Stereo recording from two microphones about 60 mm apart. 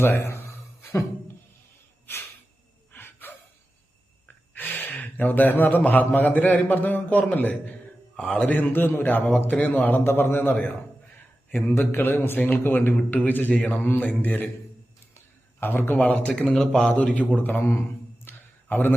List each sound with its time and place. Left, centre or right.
0.0 s a man's voice: left
2.9 s a sound: left
4.5 s a man's voice: left
8.2 s a man's voice: centre
10.0 s a man's voice: left
11.6 s a man's voice: left
13.0 s speech: centre
13.2 s a man's voice: left
15.6 s a man's voice: left
16.5 s speech: centre
17.2 s a man's voice: left
17.6 s a man's voice: left
18.3 s a sound: left